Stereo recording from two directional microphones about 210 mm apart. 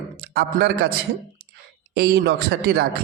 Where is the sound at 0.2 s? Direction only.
45° right (ahead or behind).